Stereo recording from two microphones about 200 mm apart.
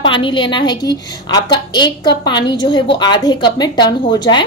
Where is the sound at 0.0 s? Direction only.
25° left (ahead or behind).